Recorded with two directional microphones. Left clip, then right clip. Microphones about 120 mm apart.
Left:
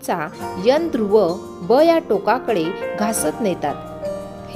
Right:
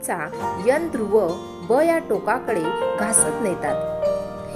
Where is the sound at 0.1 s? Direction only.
45° left (ahead or behind).